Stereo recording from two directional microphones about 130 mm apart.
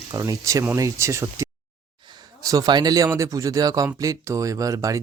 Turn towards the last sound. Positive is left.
turn(degrees=-25)  # may be behind; listen again after turning